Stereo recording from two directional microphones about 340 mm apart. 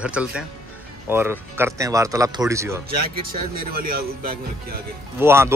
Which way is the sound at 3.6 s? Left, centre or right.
Right.